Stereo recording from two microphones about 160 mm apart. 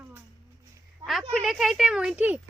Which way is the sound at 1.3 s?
Centre (ahead or behind).